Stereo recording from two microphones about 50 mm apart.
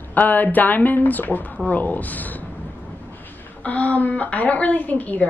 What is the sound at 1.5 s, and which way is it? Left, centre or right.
Speech, left.